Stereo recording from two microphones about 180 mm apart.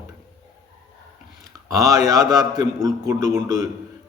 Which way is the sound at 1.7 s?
20° right (ahead or behind).